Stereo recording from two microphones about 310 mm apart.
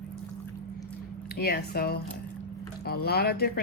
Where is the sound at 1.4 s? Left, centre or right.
Left.